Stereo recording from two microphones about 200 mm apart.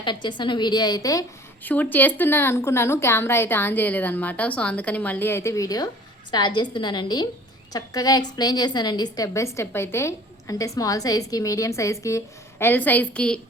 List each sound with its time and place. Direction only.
0.0 s a woman's voice: 25° left (ahead or behind); by 13.4 s 5° left (ahead or behind)